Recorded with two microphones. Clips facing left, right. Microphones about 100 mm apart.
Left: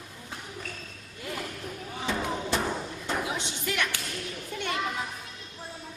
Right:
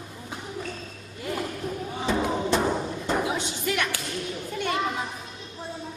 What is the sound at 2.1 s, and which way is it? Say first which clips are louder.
Music: right 5 dB; 15° right (ahead or behind).